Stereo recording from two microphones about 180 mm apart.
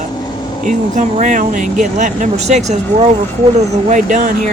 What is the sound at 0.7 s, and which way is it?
Speech, 45° right (ahead or behind).